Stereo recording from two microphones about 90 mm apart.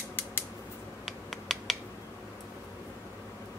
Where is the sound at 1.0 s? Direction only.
Centre (ahead or behind).